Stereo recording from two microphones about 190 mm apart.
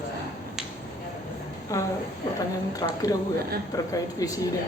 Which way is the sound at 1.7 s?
15° left (ahead or behind).